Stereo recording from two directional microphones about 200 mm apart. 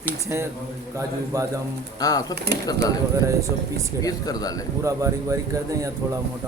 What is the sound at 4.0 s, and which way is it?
Speech, 20° left (ahead or behind).